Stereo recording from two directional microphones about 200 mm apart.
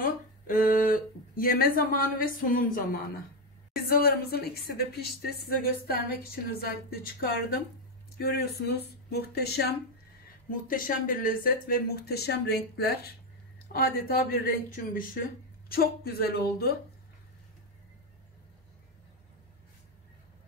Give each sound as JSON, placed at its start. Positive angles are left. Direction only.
{"t": 0.0, "sound": "a woman's voice", "side_deg": 40}
{"t": 15.7, "sound": "a woman's voice", "side_deg": 50}